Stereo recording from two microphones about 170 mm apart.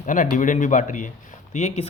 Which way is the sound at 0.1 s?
50° left (ahead or behind).